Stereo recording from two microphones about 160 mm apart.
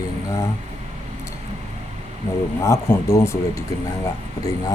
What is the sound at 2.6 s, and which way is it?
Speech, 20° left (ahead or behind).